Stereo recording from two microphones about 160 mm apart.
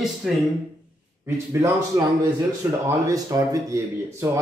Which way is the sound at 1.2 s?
15° right (ahead or behind).